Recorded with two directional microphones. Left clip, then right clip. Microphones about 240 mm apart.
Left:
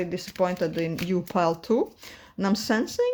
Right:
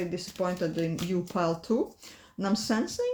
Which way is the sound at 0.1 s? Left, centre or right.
Left.